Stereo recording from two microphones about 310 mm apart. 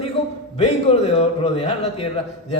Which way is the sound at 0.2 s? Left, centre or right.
Centre.